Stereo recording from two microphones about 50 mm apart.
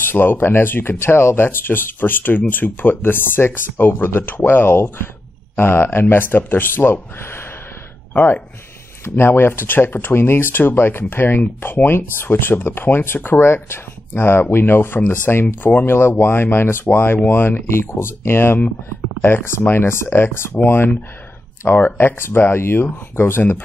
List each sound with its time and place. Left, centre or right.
0.1 s speech: left
8.1 s speech: left
9.1 s speech: left
21.6 s speech: left